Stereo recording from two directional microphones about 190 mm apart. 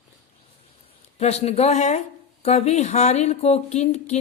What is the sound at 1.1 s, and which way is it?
A woman's voice, 35° left (ahead or behind).